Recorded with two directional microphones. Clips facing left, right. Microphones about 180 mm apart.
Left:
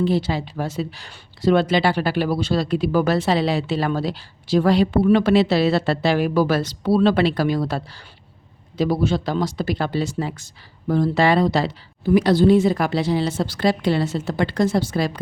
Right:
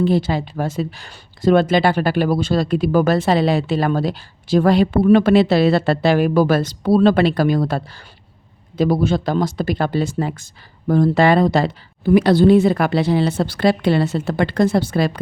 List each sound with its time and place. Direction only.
0.0 s speech: 50° right (ahead or behind)
8.8 s speech: 50° right (ahead or behind)